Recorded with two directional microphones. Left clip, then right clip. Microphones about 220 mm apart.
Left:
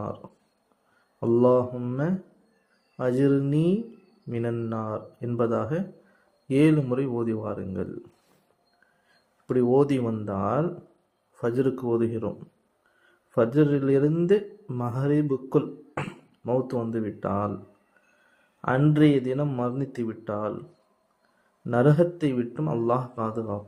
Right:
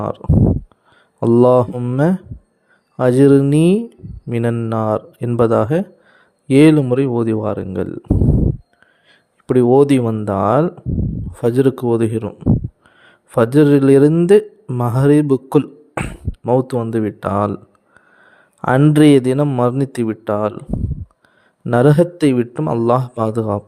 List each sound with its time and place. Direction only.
0.0 s speech: 50° right (ahead or behind)
9.5 s speech: 45° right (ahead or behind)
18.6 s speech: 45° right (ahead or behind)